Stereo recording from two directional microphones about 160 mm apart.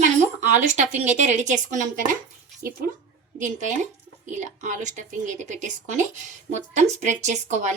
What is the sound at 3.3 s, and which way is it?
A woman's voice, 55° right (ahead or behind).